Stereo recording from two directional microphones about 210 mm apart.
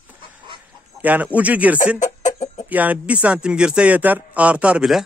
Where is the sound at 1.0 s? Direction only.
5° right (ahead or behind).